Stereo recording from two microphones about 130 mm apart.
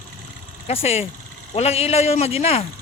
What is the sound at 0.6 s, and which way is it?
A man's voice, 50° left (ahead or behind).